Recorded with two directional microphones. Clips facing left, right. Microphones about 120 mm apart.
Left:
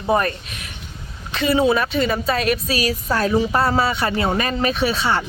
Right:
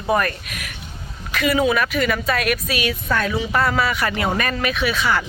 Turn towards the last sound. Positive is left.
turn(degrees=30)  # may be behind; listen again after turning